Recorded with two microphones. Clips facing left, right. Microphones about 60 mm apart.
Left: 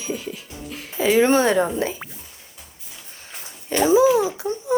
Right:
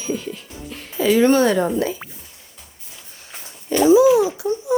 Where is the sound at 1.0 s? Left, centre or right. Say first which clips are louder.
Right 2 dB; left.